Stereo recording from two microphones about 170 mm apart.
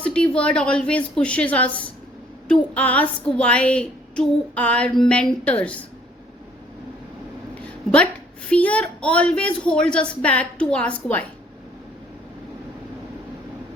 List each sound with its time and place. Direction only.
0.0 s child singing: 5° left (ahead or behind)
7.5 s a sound: 5° left (ahead or behind)
8.4 s child singing: 5° left (ahead or behind)